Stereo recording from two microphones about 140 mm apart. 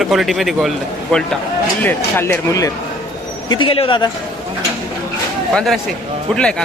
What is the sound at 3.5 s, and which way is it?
Speech, 40° left (ahead or behind).